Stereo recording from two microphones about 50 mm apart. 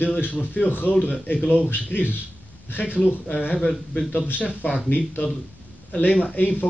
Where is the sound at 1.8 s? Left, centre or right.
Left.